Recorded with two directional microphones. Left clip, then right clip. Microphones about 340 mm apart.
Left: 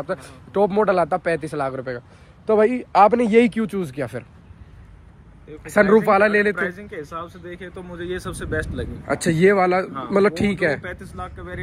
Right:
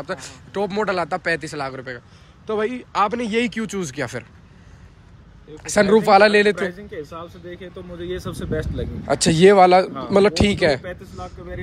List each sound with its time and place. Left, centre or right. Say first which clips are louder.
0.0 s a man's voice: left 2 dB; centre
5.6 s a man's voice: even; centre